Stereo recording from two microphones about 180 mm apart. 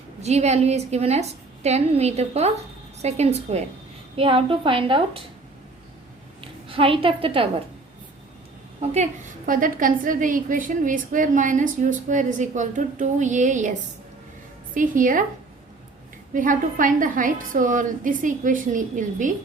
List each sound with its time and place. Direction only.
0.2 s a woman's voice: 40° right (ahead or behind)
6.4 s a woman's voice: 30° right (ahead or behind)
8.8 s a woman's voice: 35° right (ahead or behind)
9.5 s a woman's voice: 50° right (ahead or behind)
16.3 s a woman's voice: 50° right (ahead or behind)